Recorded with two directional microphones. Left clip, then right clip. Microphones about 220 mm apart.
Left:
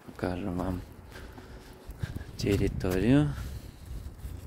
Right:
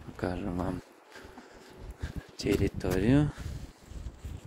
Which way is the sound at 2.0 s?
15° left (ahead or behind).